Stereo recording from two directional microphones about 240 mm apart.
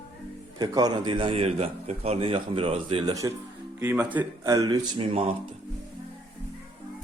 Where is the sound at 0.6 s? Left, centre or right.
Centre.